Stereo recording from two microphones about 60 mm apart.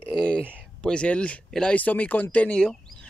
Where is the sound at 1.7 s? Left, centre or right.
Left.